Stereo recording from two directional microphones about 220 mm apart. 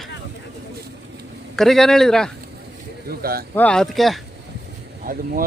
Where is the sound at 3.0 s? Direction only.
45° right (ahead or behind).